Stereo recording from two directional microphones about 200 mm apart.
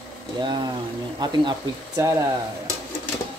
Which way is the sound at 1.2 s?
20° right (ahead or behind).